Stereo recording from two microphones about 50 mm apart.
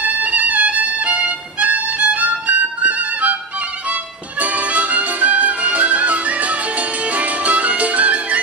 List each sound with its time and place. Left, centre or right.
0.0 s violin: right
3.9 s music: right